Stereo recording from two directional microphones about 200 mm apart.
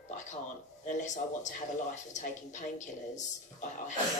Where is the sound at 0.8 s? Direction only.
35° left (ahead or behind).